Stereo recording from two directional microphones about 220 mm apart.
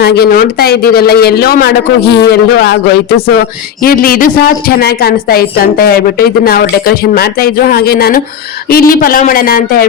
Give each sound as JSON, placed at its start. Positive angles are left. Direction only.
{"t": 0.0, "sound": "a woman's voice", "side_deg": 45}